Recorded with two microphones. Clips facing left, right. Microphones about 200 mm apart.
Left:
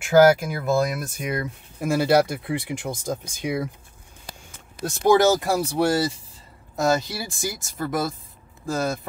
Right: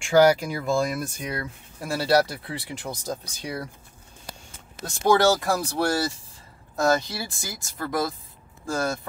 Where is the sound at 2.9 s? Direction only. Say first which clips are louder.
Left 1 dB; 15° left (ahead or behind).